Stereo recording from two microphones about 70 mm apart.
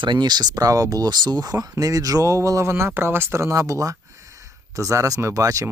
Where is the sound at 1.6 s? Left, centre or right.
Right.